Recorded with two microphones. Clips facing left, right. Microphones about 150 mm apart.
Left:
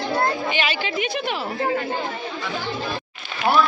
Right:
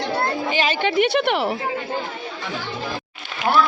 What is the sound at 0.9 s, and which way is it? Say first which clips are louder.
Speech: right 7 dB; 65° right (ahead or behind).